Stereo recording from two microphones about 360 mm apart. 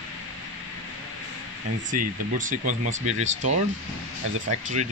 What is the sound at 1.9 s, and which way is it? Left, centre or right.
Speech, right.